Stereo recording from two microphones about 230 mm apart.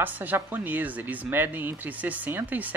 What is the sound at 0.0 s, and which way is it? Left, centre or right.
Speech, centre.